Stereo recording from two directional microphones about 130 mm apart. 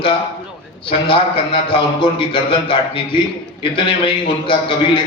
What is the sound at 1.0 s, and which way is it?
A man's voice, 45° left (ahead or behind).